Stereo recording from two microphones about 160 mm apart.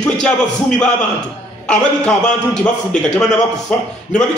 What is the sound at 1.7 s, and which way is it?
A man's voice, 5° left (ahead or behind).